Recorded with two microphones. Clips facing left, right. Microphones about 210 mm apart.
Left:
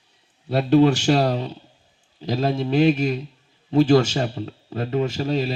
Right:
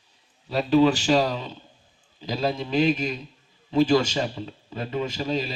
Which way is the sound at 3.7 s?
50° left (ahead or behind).